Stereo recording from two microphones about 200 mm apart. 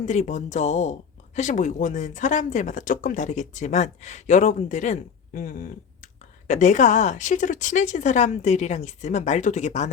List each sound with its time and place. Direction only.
0.0 s speech: 35° left (ahead or behind)